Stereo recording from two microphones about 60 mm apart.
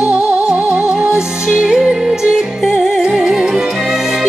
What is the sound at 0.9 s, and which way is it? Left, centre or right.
Music, centre.